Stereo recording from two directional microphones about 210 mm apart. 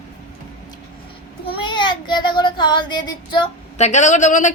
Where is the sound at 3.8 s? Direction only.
35° left (ahead or behind).